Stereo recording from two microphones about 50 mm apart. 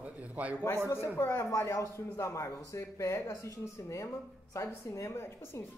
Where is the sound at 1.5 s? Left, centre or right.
Left.